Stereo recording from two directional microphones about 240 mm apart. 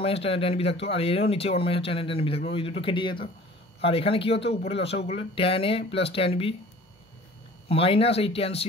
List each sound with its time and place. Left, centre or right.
0.0 s speech: left
7.6 s speech: left